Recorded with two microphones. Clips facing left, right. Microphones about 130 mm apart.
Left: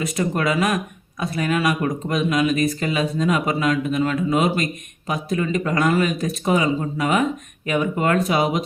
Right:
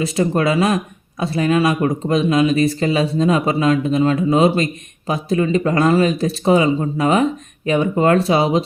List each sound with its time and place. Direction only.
0.0 s speech: 30° right (ahead or behind)